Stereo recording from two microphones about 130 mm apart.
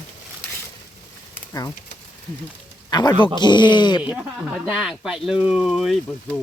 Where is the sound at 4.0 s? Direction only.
5° right (ahead or behind).